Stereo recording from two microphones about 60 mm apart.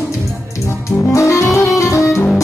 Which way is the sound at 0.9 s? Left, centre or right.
Left.